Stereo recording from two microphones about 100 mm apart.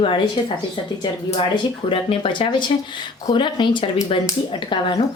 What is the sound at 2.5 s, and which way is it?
A woman's voice, 50° left (ahead or behind).